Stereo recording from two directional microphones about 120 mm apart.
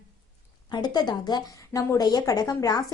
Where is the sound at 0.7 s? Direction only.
35° left (ahead or behind).